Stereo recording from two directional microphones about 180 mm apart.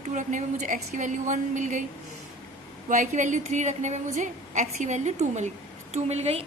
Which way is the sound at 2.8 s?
45° right (ahead or behind).